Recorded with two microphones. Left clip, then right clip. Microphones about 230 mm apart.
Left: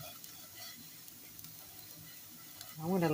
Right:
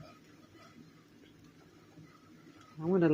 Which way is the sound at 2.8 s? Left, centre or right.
Centre.